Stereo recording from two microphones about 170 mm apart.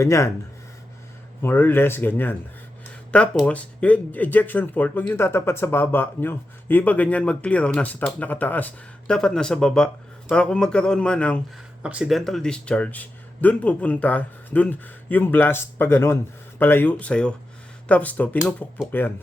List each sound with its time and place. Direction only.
0.0 s speech: 15° left (ahead or behind)
1.4 s speech: 10° left (ahead or behind)
11.8 s speech: 5° right (ahead or behind); by 19.1 s 10° left (ahead or behind)